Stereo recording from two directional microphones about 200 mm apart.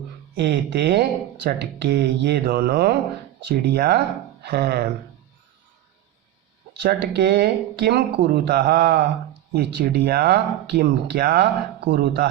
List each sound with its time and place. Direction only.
0.3 s speech: 55° right (ahead or behind)
6.7 s speech: 55° right (ahead or behind)